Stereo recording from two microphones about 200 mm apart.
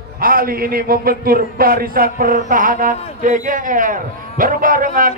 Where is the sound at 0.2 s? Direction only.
45° right (ahead or behind).